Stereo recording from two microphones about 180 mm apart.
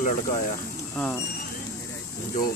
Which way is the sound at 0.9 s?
10° left (ahead or behind).